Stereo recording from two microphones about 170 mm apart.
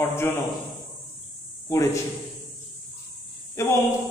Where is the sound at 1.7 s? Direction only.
20° left (ahead or behind).